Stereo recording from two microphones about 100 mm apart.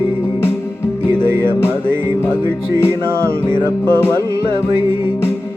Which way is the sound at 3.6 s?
20° left (ahead or behind).